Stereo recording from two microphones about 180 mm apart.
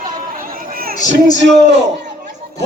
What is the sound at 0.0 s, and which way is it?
Chatter, 50° right (ahead or behind).